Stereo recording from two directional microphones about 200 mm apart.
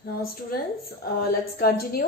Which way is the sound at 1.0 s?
45° left (ahead or behind).